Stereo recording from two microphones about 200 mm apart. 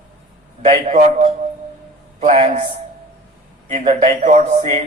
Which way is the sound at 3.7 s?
30° right (ahead or behind).